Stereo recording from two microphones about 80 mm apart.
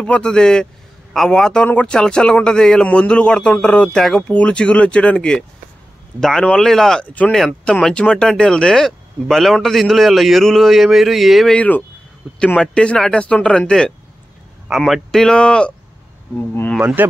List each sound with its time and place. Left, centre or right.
0.0 s a man's voice: centre
11.5 s a man's voice: centre
16.3 s speech: left
16.8 s speech: right